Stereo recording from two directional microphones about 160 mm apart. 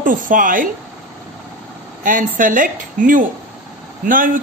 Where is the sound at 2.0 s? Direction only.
55° right (ahead or behind).